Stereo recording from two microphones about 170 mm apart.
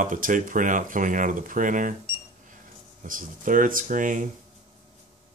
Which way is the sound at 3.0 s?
55° right (ahead or behind).